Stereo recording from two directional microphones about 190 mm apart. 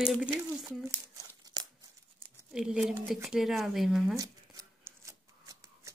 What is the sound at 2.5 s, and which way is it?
Speech, 5° right (ahead or behind).